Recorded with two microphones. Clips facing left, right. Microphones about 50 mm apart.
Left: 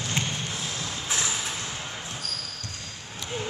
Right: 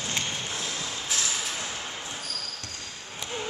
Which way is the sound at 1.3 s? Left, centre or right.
Centre.